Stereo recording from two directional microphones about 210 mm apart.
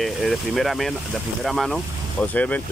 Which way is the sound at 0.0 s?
Centre (ahead or behind).